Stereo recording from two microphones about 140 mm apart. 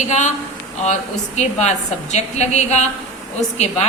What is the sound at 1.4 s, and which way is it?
A woman's voice, 55° left (ahead or behind).